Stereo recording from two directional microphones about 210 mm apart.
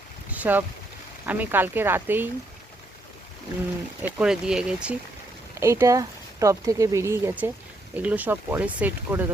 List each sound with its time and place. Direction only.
0.3 s boat: 10° right (ahead or behind)
1.2 s speech: 10° right (ahead or behind)
4.0 s speech: 5° right (ahead or behind)